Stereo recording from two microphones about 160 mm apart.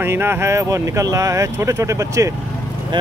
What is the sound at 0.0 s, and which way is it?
Speech, 15° right (ahead or behind).